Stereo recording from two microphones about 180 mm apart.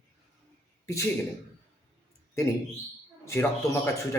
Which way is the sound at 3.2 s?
15° left (ahead or behind).